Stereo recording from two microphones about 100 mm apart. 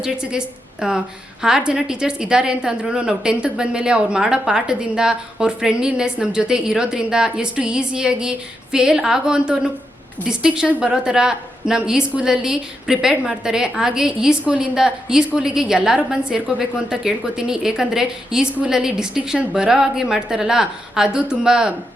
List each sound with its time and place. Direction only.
0.0 s a woman's voice: 10° right (ahead or behind)